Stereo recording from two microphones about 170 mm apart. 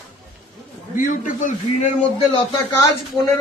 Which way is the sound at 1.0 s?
50° left (ahead or behind).